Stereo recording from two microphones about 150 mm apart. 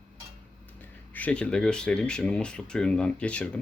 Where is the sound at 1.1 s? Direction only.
10° left (ahead or behind).